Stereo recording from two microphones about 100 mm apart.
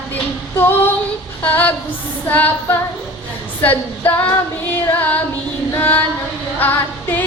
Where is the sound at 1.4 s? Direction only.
20° left (ahead or behind).